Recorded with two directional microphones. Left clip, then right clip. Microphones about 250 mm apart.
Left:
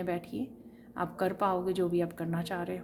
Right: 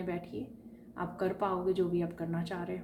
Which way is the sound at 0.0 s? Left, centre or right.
Left.